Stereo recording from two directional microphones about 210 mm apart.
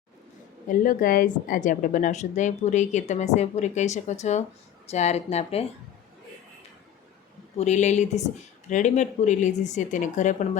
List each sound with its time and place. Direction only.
0.7 s a woman's voice: 40° left (ahead or behind)
7.6 s a woman's voice: 35° left (ahead or behind)